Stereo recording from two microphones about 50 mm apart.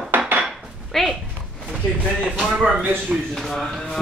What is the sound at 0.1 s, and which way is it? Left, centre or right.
Cutlery, right.